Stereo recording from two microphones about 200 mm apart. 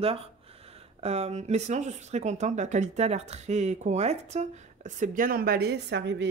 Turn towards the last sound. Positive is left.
turn(degrees=-60)  # may be behind; listen again after turning